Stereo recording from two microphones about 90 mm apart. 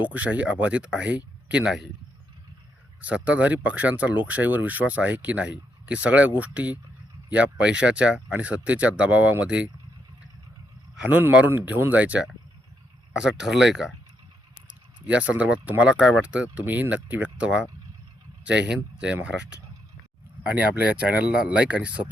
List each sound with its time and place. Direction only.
0.0 s speech: 15° right (ahead or behind)
3.2 s speech: 15° right (ahead or behind)
10.9 s speech: 15° right (ahead or behind)
15.0 s speech: 15° right (ahead or behind)